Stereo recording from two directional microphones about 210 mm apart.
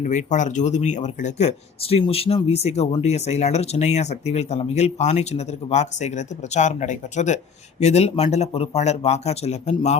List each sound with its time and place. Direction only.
0.0 s speech: 35° left (ahead or behind)